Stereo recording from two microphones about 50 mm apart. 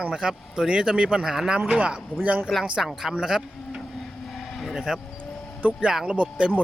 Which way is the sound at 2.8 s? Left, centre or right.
Centre.